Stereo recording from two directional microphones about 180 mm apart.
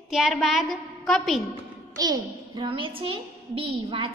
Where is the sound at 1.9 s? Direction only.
20° right (ahead or behind).